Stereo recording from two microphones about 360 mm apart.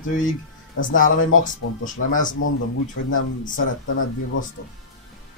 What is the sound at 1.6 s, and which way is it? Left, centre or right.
Speech, left.